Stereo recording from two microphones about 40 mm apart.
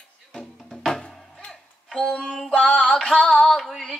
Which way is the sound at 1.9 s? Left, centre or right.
Centre.